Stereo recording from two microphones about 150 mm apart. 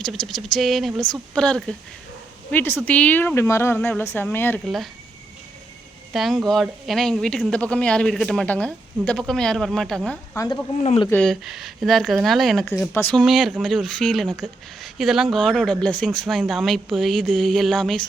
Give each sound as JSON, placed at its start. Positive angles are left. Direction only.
{"t": 0.0, "sound": "speech", "side_deg": 0}
{"t": 4.6, "sound": "speech", "side_deg": 0}
{"t": 6.1, "sound": "speech", "side_deg": 0}
{"t": 10.3, "sound": "speech", "side_deg": 25}
{"t": 11.1, "sound": "speech", "side_deg": 5}
{"t": 12.9, "sound": "speech", "side_deg": 15}
{"t": 13.1, "sound": "speech", "side_deg": 0}